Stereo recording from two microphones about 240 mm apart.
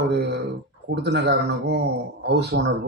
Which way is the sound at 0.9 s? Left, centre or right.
Right.